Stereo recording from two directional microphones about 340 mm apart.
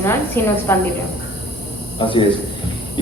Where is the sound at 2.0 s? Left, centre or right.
Centre.